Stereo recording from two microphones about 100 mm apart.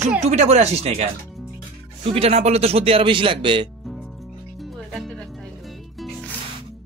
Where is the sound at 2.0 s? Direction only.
75° right (ahead or behind); by 3.7 s 60° right (ahead or behind).